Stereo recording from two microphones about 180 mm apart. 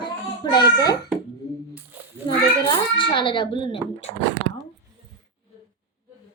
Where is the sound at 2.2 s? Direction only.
25° left (ahead or behind).